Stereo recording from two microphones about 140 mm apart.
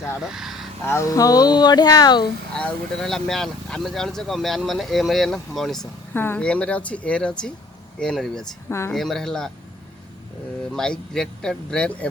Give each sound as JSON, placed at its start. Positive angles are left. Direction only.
{"t": 0.2, "sound": "speech", "side_deg": -5}
{"t": 0.9, "sound": "speech", "side_deg": 20}
{"t": 2.5, "sound": "speech", "side_deg": 5}
{"t": 6.1, "sound": "speech", "side_deg": 15}
{"t": 10.8, "sound": "speech", "side_deg": 5}